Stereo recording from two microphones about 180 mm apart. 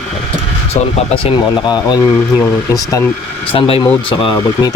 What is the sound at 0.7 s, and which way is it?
Speech, 30° left (ahead or behind).